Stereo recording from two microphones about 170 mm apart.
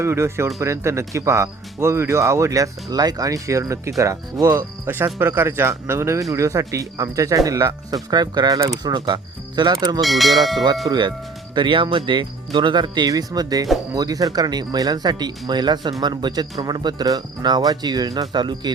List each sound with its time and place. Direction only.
0.0 s speech: 15° right (ahead or behind)
10.0 s speech: centre (ahead or behind)
10.8 s speech: 25° right (ahead or behind)